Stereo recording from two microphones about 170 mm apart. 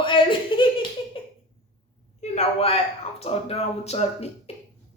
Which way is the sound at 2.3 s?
35° left (ahead or behind).